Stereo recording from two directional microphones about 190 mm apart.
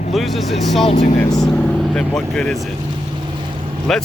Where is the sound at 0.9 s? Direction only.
35° left (ahead or behind).